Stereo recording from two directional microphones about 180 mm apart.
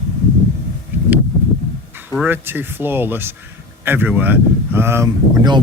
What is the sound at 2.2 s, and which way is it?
Speech, 10° right (ahead or behind).